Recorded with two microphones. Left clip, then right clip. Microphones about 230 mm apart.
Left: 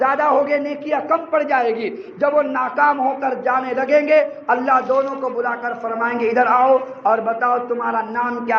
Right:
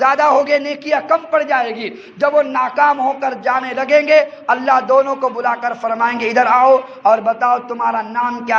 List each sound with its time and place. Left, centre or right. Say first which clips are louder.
0.0 s a man's voice: right 4 dB; right